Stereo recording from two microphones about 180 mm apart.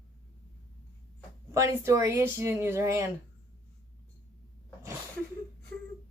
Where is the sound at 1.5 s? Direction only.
15° right (ahead or behind).